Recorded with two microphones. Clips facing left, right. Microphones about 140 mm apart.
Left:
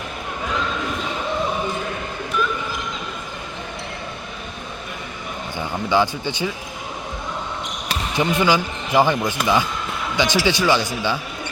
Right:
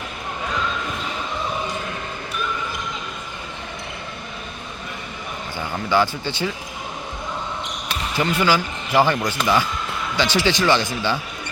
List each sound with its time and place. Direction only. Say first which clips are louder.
5.5 s speech: left 1 dB; 15° left (ahead or behind)
8.1 s speech: left 1 dB; 20° left (ahead or behind)